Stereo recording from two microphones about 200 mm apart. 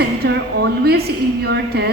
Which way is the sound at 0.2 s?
50° right (ahead or behind).